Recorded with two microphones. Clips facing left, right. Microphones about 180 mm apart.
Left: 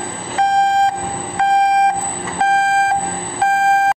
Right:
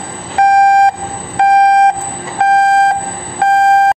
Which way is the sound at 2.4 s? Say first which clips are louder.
Right 6 dB; 55° right (ahead or behind).